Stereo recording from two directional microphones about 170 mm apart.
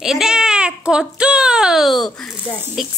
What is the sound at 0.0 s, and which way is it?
Speech, 5° right (ahead or behind).